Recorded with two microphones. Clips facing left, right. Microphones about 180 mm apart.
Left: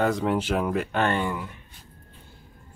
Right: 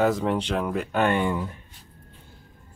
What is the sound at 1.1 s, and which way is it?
Speech, 20° right (ahead or behind).